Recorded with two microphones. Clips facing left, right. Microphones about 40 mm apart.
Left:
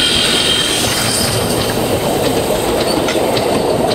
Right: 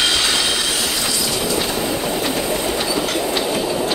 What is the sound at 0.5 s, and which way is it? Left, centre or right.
Train, left.